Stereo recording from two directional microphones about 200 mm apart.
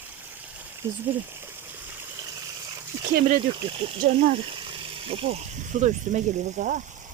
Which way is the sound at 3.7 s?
30° right (ahead or behind).